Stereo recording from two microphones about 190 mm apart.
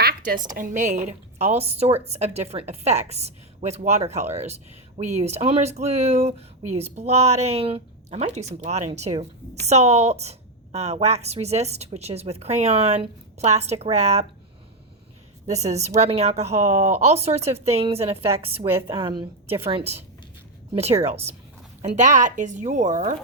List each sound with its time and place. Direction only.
0.0 s a sound: 55° right (ahead or behind)
0.5 s a woman's voice: 40° right (ahead or behind)
15.4 s a woman's voice: 35° right (ahead or behind)